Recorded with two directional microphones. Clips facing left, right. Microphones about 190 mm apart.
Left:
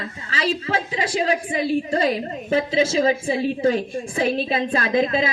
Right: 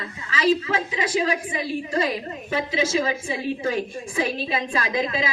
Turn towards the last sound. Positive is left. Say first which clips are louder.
# left 5 dB
turn(degrees=50)  # may be behind; listen again after turning